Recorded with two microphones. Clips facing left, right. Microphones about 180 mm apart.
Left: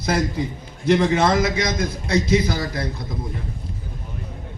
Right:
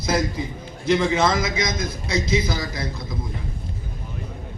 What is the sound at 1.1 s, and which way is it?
A man's voice, 60° left (ahead or behind).